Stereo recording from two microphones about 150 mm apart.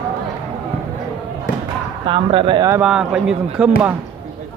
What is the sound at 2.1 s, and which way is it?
Speech, 35° right (ahead or behind).